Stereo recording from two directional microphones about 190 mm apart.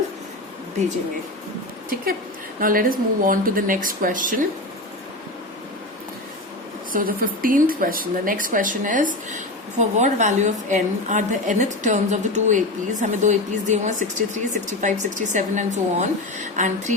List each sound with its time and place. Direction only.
2.6 s speech: 50° right (ahead or behind)
6.9 s speech: 45° right (ahead or behind)